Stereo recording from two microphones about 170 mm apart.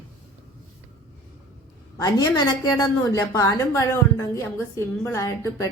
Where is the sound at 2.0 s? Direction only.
20° left (ahead or behind).